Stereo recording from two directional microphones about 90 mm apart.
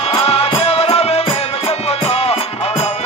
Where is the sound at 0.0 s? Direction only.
90° left.